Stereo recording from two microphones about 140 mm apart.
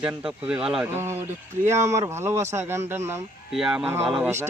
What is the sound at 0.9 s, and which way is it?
Speech, 20° right (ahead or behind).